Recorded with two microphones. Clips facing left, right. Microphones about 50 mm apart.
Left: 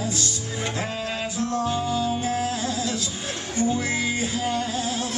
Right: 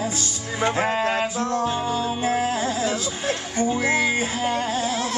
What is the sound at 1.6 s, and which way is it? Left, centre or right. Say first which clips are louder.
Music: right 1 dB; right.